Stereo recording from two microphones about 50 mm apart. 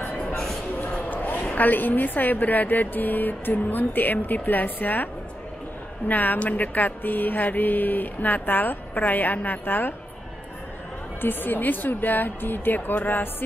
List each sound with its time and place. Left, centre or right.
1.1 s a sound: left
1.4 s speech: left
11.1 s speech: left